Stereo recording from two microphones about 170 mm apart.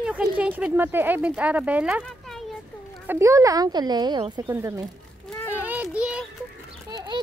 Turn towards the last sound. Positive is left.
turn(degrees=-25)  # may be behind; listen again after turning